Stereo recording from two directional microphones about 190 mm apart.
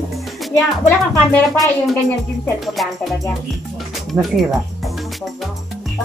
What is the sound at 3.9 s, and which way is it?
Music, centre (ahead or behind).